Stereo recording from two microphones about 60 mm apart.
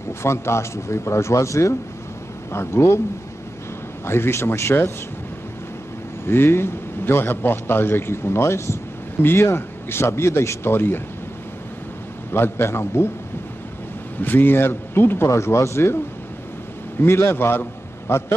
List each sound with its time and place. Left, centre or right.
0.2 s speech: left
4.0 s speech: left
6.2 s a man's voice: left
12.3 s speech: left
14.2 s a man's voice: left
15.2 s speech: left
17.0 s a man's voice: left